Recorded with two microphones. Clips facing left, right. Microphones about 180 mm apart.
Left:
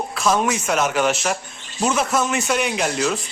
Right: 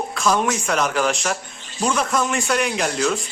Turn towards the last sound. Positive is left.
turn(degrees=5)  # may be behind; listen again after turning